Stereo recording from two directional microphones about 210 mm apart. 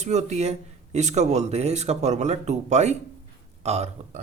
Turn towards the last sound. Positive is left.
turn(degrees=-30)  # may be behind; listen again after turning